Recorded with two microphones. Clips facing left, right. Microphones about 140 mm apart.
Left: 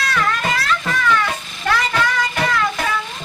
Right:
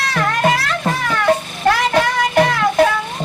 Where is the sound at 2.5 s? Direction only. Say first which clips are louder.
Right 4 dB; 55° right (ahead or behind).